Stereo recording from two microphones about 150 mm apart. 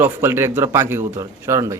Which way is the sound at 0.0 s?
15° right (ahead or behind).